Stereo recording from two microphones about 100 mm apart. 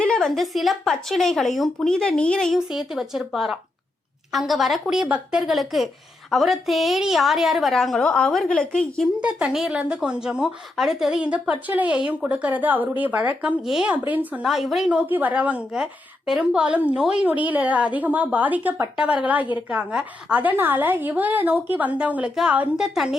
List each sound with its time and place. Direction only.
0.0 s a woman's voice: 5° left (ahead or behind)
2.6 s a woman's voice: 5° right (ahead or behind)
5.0 s speech: 15° right (ahead or behind)
5.4 s a woman's voice: centre (ahead or behind)
9.2 s speech: 10° right (ahead or behind)
14.1 s speech: 15° right (ahead or behind)
14.4 s a woman's voice: centre (ahead or behind)
14.8 s speech: 15° right (ahead or behind)